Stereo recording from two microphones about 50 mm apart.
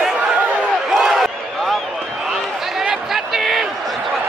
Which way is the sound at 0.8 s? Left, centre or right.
Centre.